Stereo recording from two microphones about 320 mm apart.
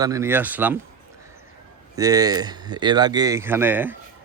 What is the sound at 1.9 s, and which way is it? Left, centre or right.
Speech, centre.